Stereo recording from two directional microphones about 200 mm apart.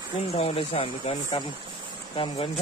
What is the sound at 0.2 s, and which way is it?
Speech, 30° left (ahead or behind).